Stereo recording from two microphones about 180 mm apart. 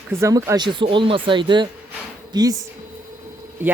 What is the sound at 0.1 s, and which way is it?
Speech, 15° right (ahead or behind).